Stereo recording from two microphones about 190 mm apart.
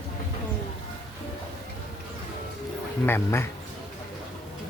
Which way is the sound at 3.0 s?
15° left (ahead or behind).